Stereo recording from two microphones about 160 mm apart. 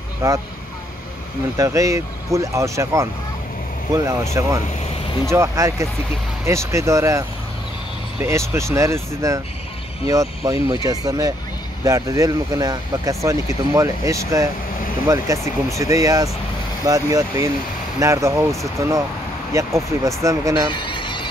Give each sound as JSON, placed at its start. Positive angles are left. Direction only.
{"t": 0.2, "sound": "speech", "side_deg": -20}
{"t": 1.6, "sound": "speech", "side_deg": -20}
{"t": 20.7, "sound": "music", "side_deg": 30}